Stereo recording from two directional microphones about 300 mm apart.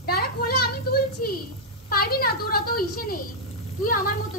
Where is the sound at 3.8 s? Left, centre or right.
Left.